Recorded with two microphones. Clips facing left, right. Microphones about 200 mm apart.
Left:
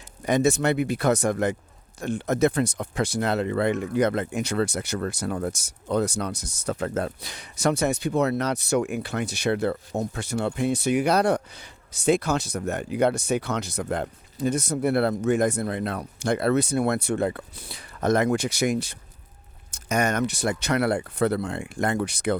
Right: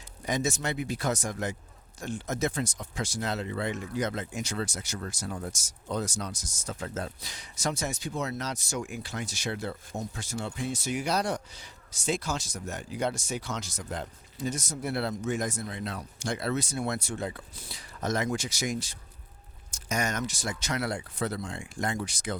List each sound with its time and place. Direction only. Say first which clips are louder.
0.3 s speech: left 9 dB; 60° left (ahead or behind)